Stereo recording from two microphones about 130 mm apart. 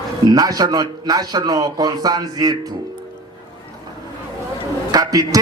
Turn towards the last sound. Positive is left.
turn(degrees=-30)  # may be behind; listen again after turning